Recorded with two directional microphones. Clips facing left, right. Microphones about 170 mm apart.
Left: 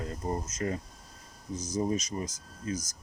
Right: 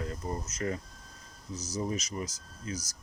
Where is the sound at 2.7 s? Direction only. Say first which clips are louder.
Left 4 dB; 50° left (ahead or behind).